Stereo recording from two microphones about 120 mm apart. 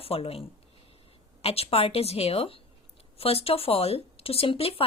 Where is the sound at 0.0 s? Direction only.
55° left (ahead or behind).